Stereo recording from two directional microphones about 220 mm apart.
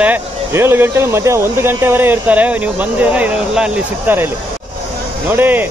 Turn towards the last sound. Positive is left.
turn(degrees=-10)  # may be behind; listen again after turning